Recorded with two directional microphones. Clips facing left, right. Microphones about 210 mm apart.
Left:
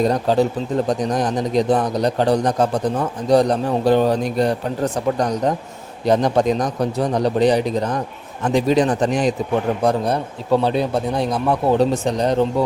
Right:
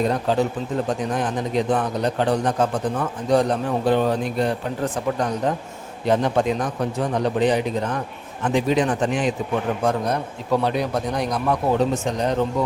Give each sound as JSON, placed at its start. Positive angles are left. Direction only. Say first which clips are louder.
{"t": 0.0, "sound": "a man's voice", "louder": "left 4 dB", "side_deg": 35}